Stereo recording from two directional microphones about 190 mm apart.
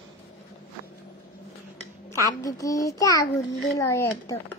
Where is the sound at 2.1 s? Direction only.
15° left (ahead or behind).